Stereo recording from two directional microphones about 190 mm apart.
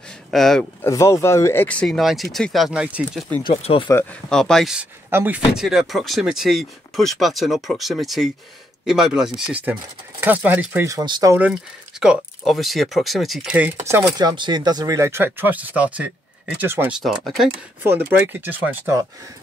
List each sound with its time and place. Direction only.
0.3 s speech: centre (ahead or behind)
0.8 s speech: 15° left (ahead or behind); by 3.3 s 5° right (ahead or behind)
3.4 s speech: 30° left (ahead or behind)
3.9 s speech: 5° left (ahead or behind); by 11.3 s 20° right (ahead or behind)
12.0 s speech: centre (ahead or behind)
14.1 s speech: 25° right (ahead or behind)
17.0 s speech: centre (ahead or behind)